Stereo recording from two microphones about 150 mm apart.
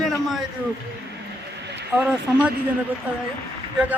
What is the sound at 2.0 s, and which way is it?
Speech, 10° right (ahead or behind).